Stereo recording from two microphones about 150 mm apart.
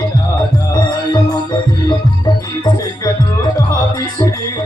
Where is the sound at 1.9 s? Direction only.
30° left (ahead or behind).